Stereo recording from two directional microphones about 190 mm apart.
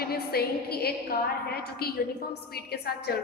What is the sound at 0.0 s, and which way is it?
A woman's voice, 55° left (ahead or behind).